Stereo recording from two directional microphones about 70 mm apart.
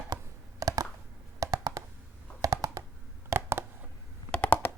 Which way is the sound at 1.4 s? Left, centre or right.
Right.